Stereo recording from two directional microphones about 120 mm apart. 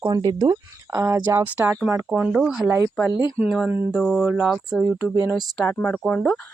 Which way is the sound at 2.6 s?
25° right (ahead or behind).